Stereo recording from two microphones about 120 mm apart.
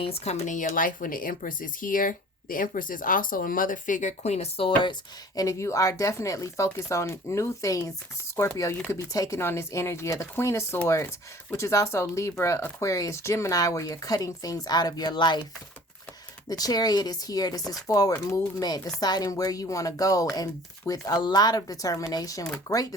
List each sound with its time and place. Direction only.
0.0 s speech: 60° left (ahead or behind); by 2.6 s 90° left
3.8 s speech: 90° left; by 4.9 s 45° left (ahead or behind)
5.4 s speech: 25° left (ahead or behind)
16.5 s speech: 30° left (ahead or behind)